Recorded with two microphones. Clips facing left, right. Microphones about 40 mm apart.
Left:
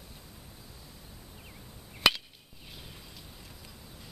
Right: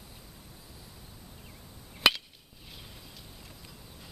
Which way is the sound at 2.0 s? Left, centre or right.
Centre.